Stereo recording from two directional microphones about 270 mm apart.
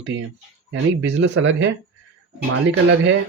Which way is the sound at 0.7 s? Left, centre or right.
Right.